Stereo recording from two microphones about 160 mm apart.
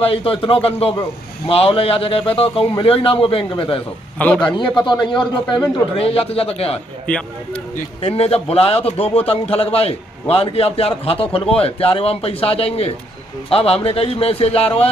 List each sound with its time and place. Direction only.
0.0 s a man's voice: 35° left (ahead or behind)
7.1 s speech: 5° left (ahead or behind)
8.0 s a man's voice: 40° left (ahead or behind)